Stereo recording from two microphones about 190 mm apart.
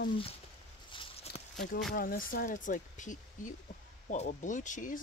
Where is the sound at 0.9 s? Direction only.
30° left (ahead or behind).